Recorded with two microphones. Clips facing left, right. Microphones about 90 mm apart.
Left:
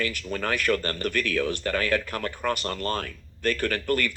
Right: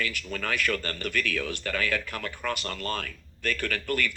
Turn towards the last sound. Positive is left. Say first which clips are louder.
# left 4 dB
turn(degrees=45)  # may be behind; listen again after turning